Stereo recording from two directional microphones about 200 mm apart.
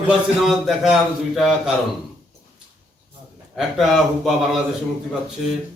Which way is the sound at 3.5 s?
Centre (ahead or behind).